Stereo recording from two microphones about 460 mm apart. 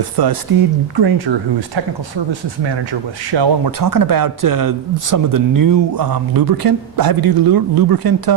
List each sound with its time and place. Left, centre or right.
0.2 s speech: right
3.8 s speech: right